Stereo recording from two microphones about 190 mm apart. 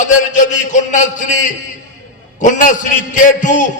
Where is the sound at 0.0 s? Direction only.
40° left (ahead or behind).